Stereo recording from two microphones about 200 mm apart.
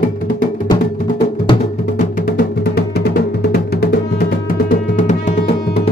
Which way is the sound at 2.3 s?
55° left (ahead or behind).